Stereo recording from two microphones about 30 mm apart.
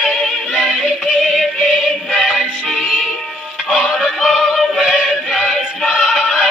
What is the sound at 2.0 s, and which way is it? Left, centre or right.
Music, centre.